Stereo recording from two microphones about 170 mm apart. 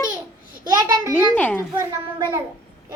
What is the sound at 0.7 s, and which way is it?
Speech, 25° right (ahead or behind).